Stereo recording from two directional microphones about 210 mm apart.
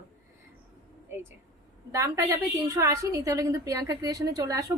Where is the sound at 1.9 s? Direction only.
10° right (ahead or behind).